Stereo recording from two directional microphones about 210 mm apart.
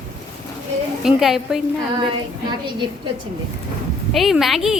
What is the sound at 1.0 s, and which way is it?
Speech, centre (ahead or behind).